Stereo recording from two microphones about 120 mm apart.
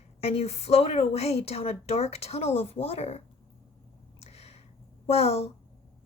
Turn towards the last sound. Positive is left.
turn(degrees=60)  # may be behind; listen again after turning